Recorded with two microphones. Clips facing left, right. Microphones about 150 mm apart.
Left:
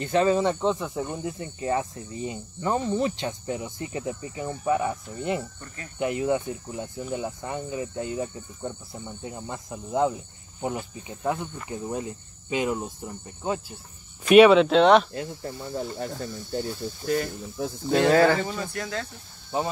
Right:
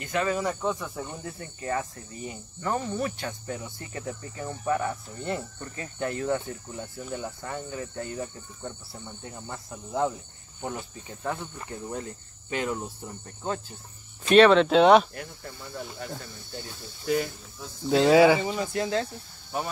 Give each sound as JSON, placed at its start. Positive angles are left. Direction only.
{"t": 0.0, "sound": "speech", "side_deg": 30}
{"t": 15.1, "sound": "speech", "side_deg": 25}
{"t": 17.0, "sound": "speech", "side_deg": -5}